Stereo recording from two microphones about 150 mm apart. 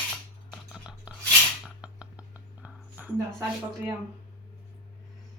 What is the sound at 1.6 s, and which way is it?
Music, 5° right (ahead or behind).